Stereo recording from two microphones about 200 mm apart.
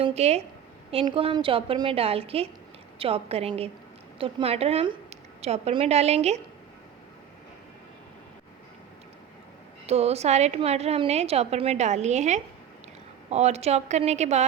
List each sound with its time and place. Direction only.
0.0 s a woman's voice: 30° right (ahead or behind)
9.8 s a woman's voice: 30° right (ahead or behind)